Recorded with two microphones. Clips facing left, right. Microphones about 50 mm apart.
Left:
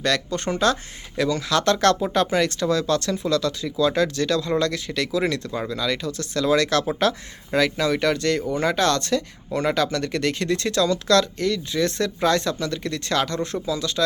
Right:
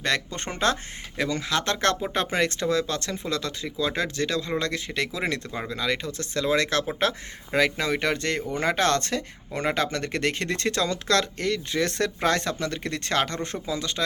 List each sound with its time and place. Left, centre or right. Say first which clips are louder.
0.0 s speech: left 4 dB; right